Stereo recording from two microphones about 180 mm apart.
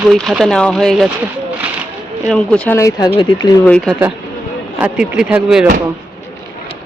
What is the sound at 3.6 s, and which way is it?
Speech, 5° left (ahead or behind).